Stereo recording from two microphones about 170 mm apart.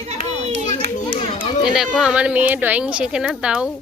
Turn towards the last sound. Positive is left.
turn(degrees=-5)  # may be behind; listen again after turning